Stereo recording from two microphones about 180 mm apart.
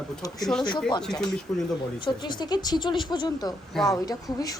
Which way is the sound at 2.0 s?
25° left (ahead or behind).